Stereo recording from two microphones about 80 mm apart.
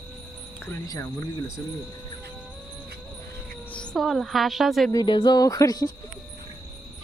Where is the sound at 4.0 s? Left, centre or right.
Centre.